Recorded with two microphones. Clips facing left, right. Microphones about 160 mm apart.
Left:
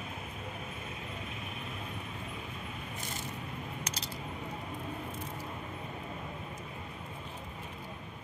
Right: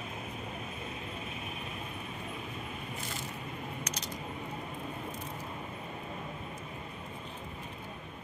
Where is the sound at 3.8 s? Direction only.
30° left (ahead or behind).